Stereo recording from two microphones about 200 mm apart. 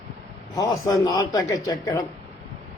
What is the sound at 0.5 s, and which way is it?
Speech, 15° left (ahead or behind).